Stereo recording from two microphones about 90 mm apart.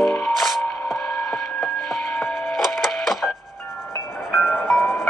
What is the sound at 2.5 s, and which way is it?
Printer, centre (ahead or behind).